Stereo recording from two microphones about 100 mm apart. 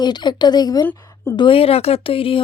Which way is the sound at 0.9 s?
35° left (ahead or behind).